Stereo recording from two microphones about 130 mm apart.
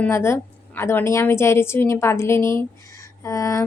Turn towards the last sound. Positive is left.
turn(degrees=25)  # may be behind; listen again after turning